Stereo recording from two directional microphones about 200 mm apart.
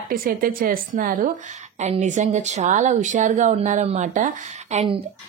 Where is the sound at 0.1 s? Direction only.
45° right (ahead or behind).